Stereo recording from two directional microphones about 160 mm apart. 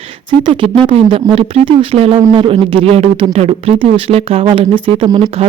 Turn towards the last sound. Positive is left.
turn(degrees=-35)  # may be behind; listen again after turning